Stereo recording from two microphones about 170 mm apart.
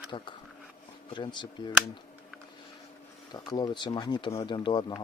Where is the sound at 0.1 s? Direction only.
30° left (ahead or behind).